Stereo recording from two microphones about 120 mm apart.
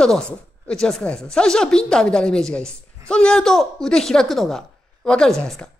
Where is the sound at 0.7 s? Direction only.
5° left (ahead or behind).